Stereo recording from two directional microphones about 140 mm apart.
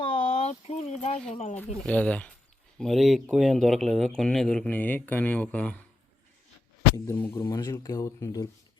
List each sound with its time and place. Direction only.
0.0 s a sound: 50° left (ahead or behind)
1.3 s speech: 60° left (ahead or behind)
1.5 s speech: 10° left (ahead or behind)
6.9 s speech: 20° left (ahead or behind)